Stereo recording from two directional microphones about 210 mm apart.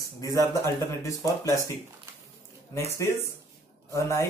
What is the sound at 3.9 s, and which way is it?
Speech, 15° left (ahead or behind).